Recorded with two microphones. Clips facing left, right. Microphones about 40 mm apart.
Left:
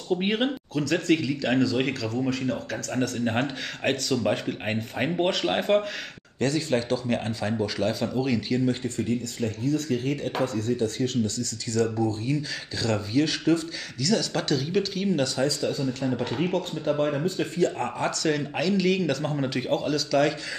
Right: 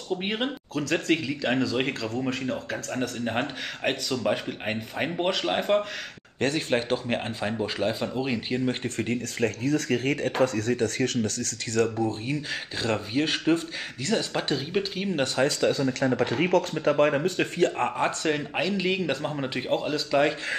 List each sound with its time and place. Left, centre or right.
0.1 s speech: centre
0.8 s speech: centre
1.6 s a man's voice: right
3.3 s speech: centre
6.4 s a man's voice: right
8.8 s speech: right
14.3 s a man's voice: right
15.2 s speech: right
15.6 s speech: right
17.2 s a man's voice: right